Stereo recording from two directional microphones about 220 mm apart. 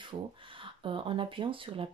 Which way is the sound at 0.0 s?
20° right (ahead or behind).